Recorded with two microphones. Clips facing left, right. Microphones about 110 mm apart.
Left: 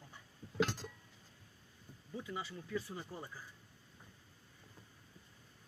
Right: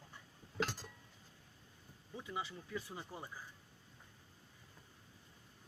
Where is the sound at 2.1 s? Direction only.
20° right (ahead or behind).